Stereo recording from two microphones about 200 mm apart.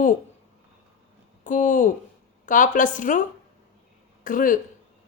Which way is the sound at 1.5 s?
40° left (ahead or behind).